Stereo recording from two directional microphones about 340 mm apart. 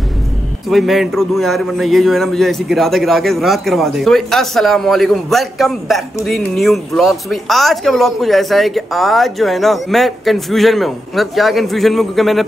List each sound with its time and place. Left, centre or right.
0.7 s a man's voice: centre